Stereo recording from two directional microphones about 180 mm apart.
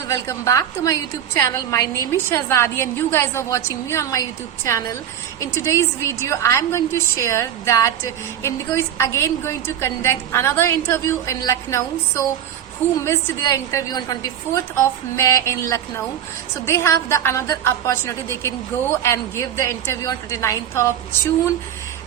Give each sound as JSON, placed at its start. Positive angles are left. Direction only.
{"t": 0.1, "sound": "a woman's voice", "side_deg": 15}